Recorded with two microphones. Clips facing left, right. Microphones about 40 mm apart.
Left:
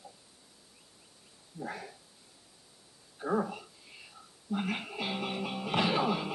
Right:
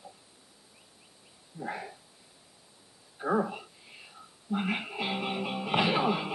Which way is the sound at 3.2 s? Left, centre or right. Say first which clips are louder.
Right 3 dB; right.